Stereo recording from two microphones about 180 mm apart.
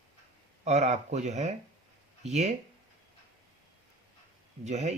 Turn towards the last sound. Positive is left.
turn(degrees=-40)  # may be behind; listen again after turning